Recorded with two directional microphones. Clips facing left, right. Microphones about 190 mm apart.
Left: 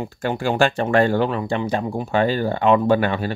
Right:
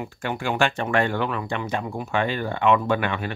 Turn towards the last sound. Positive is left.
turn(degrees=35)  # may be behind; listen again after turning